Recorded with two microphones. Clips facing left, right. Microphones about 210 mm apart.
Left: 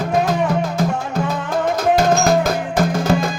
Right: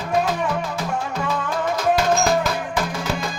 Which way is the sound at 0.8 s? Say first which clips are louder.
Left 5 dB; 45° left (ahead or behind).